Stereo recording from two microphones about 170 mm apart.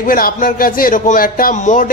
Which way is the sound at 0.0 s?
55° left (ahead or behind).